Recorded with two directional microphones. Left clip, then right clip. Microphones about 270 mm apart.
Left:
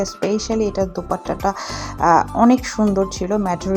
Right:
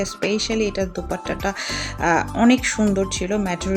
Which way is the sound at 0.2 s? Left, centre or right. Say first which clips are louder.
Left 1 dB; centre.